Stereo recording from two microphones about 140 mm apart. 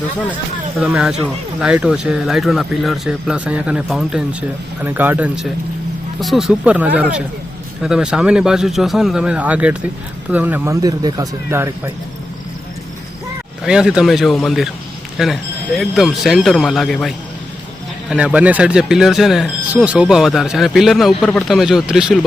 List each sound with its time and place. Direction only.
0.8 s speech: 10° right (ahead or behind)
6.1 s speech: centre (ahead or behind)
10.8 s speech: 25° right (ahead or behind)
13.7 s speech: 5° right (ahead or behind)